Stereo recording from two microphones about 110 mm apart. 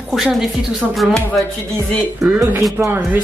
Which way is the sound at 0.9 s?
Centre (ahead or behind).